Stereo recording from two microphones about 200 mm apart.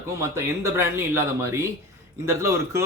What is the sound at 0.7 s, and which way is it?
Speech, 15° right (ahead or behind).